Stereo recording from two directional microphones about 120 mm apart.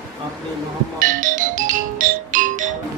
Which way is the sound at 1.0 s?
90° right.